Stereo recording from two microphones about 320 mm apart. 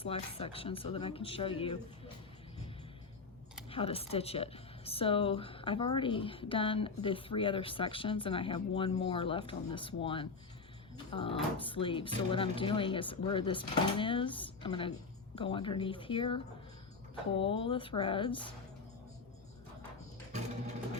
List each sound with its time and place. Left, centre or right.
0.0 s speech: centre
3.7 s speech: centre